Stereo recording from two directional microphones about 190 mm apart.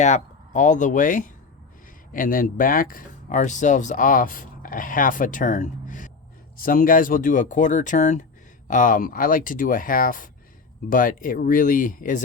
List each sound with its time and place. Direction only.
0.0 s speech: 40° left (ahead or behind)